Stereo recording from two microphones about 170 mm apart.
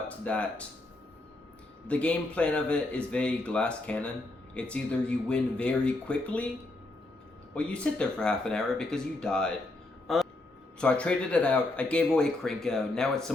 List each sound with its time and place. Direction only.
0.3 s speech: 5° left (ahead or behind)
1.9 s speech: 5° left (ahead or behind)
7.5 s speech: 5° left (ahead or behind)
10.8 s speech: 5° left (ahead or behind)